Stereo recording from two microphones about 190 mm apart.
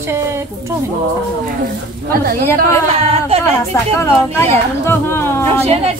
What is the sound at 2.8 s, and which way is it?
Speech, 35° right (ahead or behind).